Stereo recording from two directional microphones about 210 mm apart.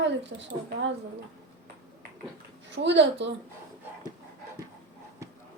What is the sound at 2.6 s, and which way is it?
Speech, 60° right (ahead or behind).